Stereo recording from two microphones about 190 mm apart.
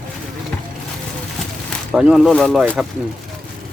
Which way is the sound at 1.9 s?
5° right (ahead or behind).